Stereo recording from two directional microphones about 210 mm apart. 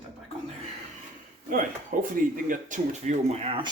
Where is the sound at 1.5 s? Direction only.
40° right (ahead or behind).